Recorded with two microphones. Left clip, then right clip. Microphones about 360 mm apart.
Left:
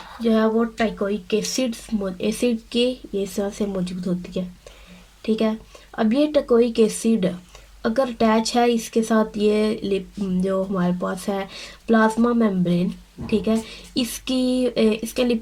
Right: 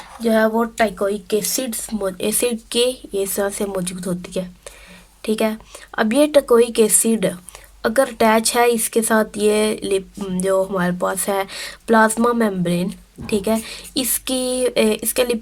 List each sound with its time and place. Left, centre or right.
0.3 s speech: right